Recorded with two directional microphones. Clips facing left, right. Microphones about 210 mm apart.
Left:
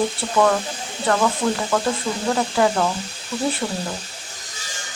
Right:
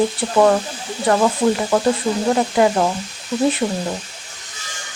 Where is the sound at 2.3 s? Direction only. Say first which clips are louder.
Right 2 dB; 20° right (ahead or behind).